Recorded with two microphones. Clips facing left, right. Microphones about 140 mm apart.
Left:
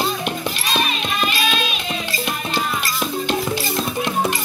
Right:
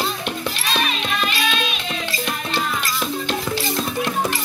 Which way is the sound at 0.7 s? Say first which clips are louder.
Left 1 dB; 5° left (ahead or behind).